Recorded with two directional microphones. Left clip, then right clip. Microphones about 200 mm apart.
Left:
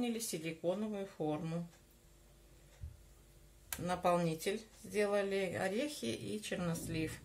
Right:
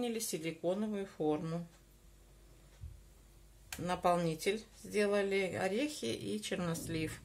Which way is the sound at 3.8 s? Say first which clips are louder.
Right 1 dB; 25° right (ahead or behind).